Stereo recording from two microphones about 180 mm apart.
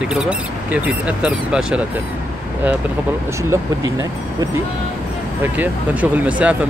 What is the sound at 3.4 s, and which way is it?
Speech, 15° right (ahead or behind).